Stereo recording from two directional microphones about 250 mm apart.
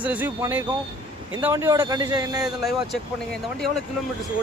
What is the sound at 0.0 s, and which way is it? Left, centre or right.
A man's voice, centre.